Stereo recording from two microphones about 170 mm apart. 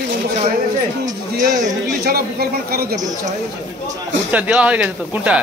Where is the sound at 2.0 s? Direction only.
65° right (ahead or behind).